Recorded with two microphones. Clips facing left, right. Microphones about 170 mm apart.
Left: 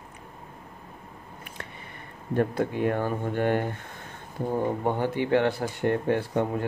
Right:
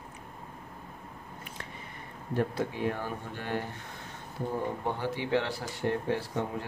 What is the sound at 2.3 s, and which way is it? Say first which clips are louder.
Speech: left 5 dB; 55° left (ahead or behind).